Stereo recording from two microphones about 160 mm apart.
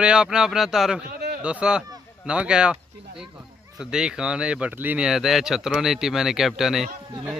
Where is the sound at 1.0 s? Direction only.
75° right (ahead or behind).